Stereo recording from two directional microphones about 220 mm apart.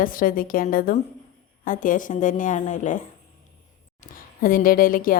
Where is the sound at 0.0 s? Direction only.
40° left (ahead or behind).